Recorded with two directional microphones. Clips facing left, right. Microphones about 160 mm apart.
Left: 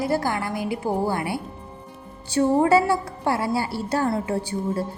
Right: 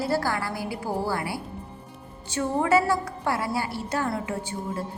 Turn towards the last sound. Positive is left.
turn(degrees=35)  # may be behind; listen again after turning